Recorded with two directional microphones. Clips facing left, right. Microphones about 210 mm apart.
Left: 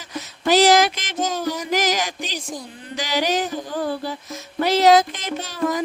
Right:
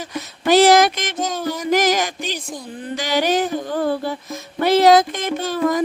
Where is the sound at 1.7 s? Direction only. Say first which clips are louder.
Right 6 dB; 55° right (ahead or behind).